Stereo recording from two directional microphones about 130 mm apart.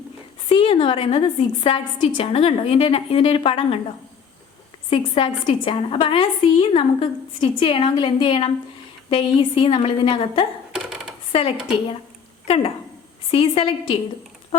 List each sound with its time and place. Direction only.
0.4 s a woman's voice: 45° left (ahead or behind)
4.9 s a woman's voice: 45° left (ahead or behind)